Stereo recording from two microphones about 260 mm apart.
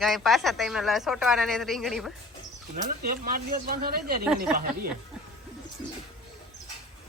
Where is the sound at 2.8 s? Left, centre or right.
Right.